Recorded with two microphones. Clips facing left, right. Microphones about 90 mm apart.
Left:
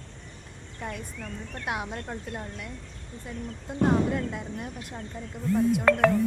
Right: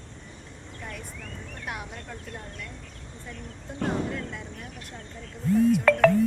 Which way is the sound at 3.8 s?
20° left (ahead or behind).